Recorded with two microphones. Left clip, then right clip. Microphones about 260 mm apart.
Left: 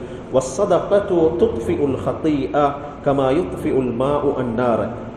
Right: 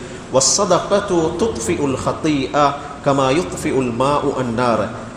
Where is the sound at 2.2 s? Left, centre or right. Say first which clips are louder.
Right 2 dB; right.